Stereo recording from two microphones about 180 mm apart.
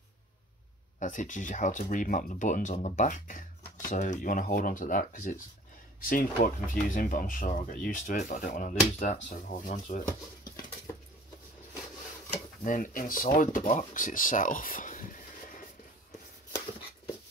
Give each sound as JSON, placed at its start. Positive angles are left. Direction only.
{"t": 0.9, "sound": "speech", "side_deg": 45}
{"t": 12.6, "sound": "speech", "side_deg": 45}